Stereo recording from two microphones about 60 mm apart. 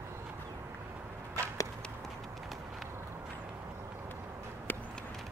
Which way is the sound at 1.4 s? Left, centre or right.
Right.